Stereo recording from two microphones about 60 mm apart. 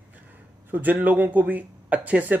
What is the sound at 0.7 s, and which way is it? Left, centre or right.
Speech, right.